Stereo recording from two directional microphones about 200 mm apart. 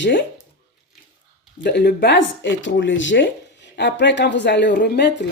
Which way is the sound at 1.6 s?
55° left (ahead or behind).